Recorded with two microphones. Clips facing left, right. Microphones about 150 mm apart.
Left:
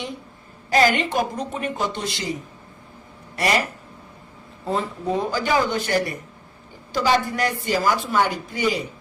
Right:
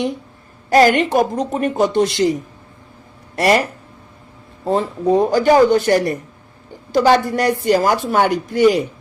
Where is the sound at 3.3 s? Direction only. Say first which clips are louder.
Right 7 dB; 45° right (ahead or behind).